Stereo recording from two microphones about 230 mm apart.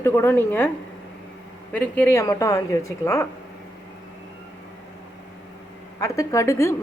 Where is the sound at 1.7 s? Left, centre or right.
Centre.